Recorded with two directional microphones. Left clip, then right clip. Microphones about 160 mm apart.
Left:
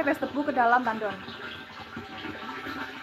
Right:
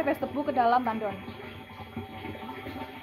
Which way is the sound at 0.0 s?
5° left (ahead or behind).